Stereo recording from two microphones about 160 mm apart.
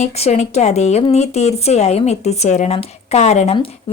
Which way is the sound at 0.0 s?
45° left (ahead or behind).